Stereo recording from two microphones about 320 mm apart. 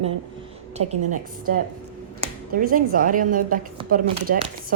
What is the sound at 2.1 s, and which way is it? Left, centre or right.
Speech, right.